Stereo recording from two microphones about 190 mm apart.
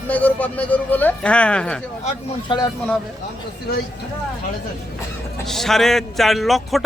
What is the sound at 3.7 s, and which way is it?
Speech, 55° left (ahead or behind).